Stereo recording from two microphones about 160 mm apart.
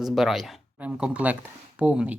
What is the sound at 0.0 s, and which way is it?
Speech, centre (ahead or behind).